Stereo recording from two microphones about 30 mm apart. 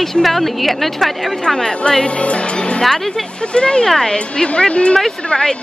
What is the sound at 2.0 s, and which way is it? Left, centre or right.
Speech, left.